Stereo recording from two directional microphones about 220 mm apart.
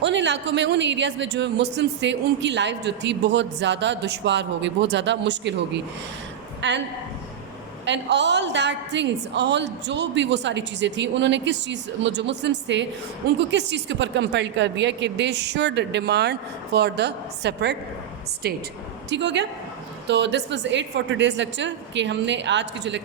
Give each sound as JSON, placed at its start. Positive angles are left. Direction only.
{"t": 0.0, "sound": "a woman's voice", "side_deg": -55}
{"t": 7.9, "sound": "a woman's voice", "side_deg": -55}